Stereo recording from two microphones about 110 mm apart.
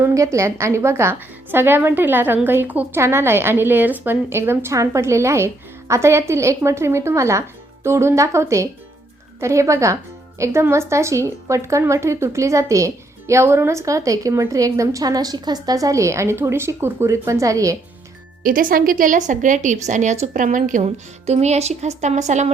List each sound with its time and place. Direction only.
0.0 s speech: 30° right (ahead or behind)
19.5 s speech: 90° right
20.8 s speech: 80° right